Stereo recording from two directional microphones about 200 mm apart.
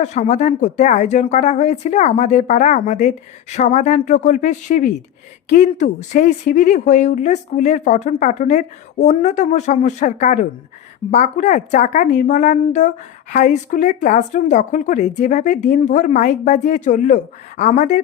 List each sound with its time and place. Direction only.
0.0 s a woman's voice: 35° left (ahead or behind)